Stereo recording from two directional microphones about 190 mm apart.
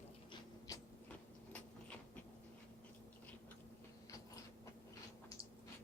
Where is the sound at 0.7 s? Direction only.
20° left (ahead or behind).